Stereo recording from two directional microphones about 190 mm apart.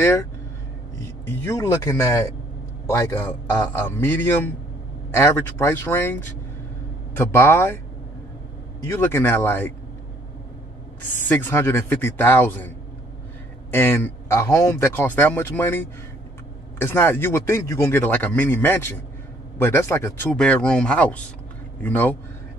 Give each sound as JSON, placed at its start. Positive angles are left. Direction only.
{"t": 0.0, "sound": "speech", "side_deg": 10}
{"t": 1.3, "sound": "a man's voice", "side_deg": 15}
{"t": 8.8, "sound": "a man's voice", "side_deg": 15}
{"t": 11.1, "sound": "a man's voice", "side_deg": 10}